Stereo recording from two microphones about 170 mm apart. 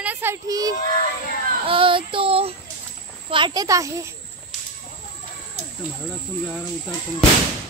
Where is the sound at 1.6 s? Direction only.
30° right (ahead or behind).